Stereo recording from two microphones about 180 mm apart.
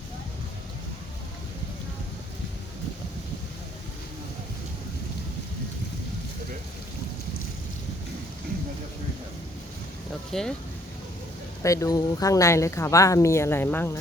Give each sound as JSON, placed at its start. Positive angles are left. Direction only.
{"t": 10.3, "sound": "speech", "side_deg": 5}
{"t": 11.6, "sound": "speech", "side_deg": 15}